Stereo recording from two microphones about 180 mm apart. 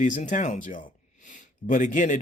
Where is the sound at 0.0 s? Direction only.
45° left (ahead or behind).